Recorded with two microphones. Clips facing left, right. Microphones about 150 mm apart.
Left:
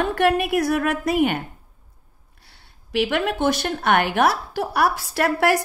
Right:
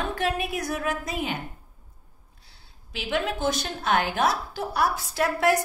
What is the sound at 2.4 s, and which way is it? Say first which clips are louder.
A woman's voice: left 4 dB; 70° left (ahead or behind).